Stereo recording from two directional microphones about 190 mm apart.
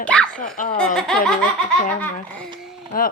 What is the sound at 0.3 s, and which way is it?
Speech, 45° left (ahead or behind).